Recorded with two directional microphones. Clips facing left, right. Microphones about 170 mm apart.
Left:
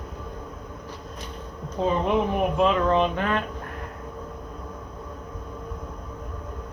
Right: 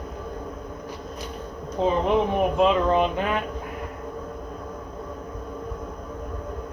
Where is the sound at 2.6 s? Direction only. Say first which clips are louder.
Right 1 dB; 15° right (ahead or behind).